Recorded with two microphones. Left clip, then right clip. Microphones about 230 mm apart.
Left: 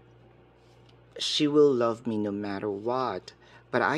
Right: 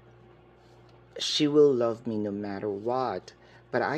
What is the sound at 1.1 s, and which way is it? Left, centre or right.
Speech, centre.